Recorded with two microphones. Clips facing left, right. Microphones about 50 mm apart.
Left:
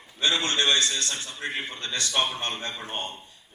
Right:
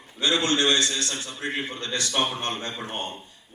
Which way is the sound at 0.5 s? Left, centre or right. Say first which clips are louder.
Right 1 dB; left.